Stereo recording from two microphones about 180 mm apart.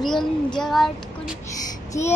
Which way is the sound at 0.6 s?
Centre (ahead or behind).